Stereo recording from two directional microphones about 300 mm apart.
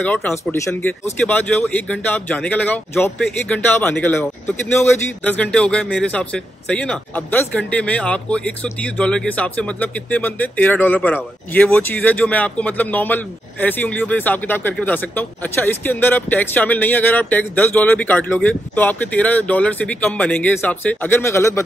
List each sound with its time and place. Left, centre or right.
0.0 s a man's voice: centre